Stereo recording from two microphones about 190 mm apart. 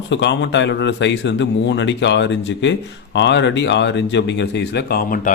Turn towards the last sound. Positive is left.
turn(degrees=45)  # may be behind; listen again after turning